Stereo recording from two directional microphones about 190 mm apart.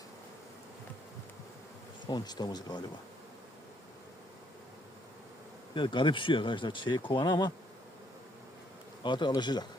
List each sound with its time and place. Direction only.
2.0 s speech: 20° left (ahead or behind)
5.7 s speech: 25° left (ahead or behind)
9.0 s speech: 25° left (ahead or behind)